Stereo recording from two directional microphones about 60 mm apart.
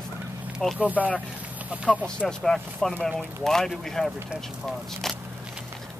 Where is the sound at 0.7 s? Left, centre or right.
Right.